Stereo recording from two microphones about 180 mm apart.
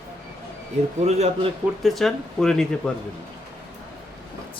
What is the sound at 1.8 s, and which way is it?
Speech, centre (ahead or behind).